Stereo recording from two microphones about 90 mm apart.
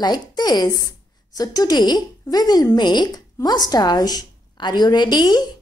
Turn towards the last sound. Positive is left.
turn(degrees=50)  # may be behind; listen again after turning